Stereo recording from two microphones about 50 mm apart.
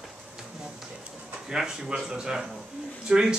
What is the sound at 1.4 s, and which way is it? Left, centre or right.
Speech, centre.